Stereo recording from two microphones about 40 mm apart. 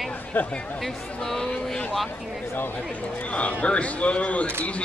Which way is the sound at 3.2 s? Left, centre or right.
Left.